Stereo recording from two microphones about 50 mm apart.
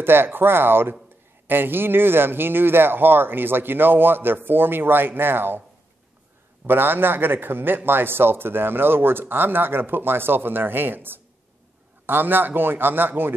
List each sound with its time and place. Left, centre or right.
0.0 s a man's voice: right
6.6 s a man's voice: right